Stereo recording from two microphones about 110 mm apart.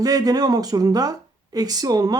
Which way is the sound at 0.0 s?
35° right (ahead or behind).